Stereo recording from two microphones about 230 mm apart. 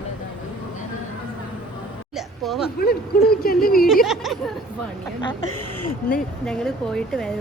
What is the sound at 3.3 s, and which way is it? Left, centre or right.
Speech, left.